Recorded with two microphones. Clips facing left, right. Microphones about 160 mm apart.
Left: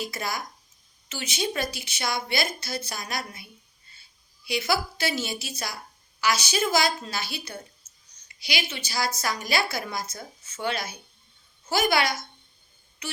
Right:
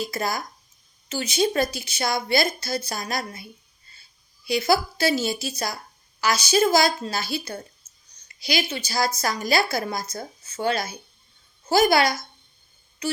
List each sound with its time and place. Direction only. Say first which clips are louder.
0.0 s a woman's voice: right 4 dB; 40° right (ahead or behind)
4.4 s a woman's voice: right 5 dB; 35° right (ahead or behind)
13.0 s a sound: right 10 dB; 35° right (ahead or behind)